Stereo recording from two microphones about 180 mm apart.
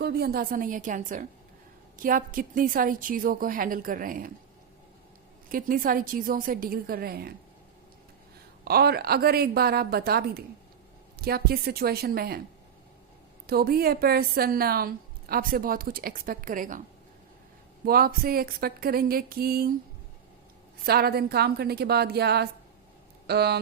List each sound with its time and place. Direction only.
0.0 s a woman's voice: 60° right (ahead or behind)
5.5 s a woman's voice: 50° right (ahead or behind)
8.6 s a woman's voice: 60° right (ahead or behind)
13.5 s a woman's voice: 60° right (ahead or behind)
17.8 s a woman's voice: 55° right (ahead or behind)
20.8 s a woman's voice: 60° right (ahead or behind)